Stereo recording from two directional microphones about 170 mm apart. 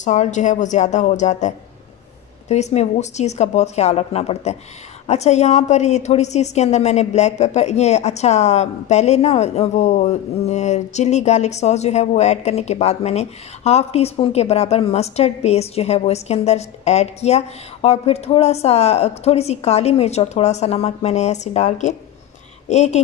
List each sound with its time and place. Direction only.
0.0 s a woman's voice: 45° left (ahead or behind)